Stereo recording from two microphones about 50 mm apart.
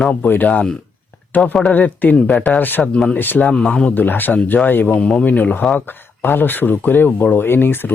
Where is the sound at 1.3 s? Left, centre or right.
Left.